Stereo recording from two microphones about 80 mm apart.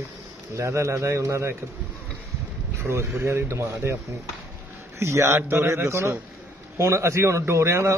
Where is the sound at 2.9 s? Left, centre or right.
Right.